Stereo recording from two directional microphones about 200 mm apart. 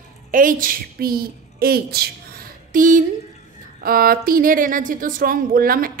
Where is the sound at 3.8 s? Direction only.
45° right (ahead or behind).